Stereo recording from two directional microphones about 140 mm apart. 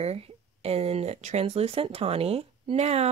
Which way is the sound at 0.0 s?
45° right (ahead or behind).